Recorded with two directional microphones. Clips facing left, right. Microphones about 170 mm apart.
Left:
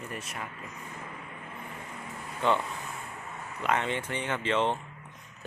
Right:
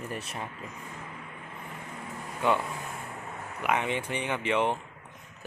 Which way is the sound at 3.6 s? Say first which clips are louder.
Right 1 dB; 15° right (ahead or behind).